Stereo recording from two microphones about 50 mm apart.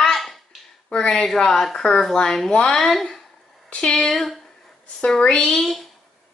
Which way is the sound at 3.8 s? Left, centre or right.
Centre.